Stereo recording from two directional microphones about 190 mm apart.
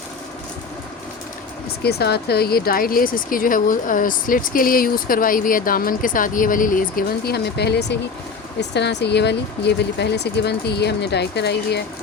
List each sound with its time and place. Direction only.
1.8 s speech: 55° left (ahead or behind)